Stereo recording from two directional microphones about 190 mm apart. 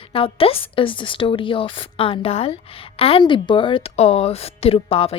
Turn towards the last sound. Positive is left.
turn(degrees=30)  # may be behind; listen again after turning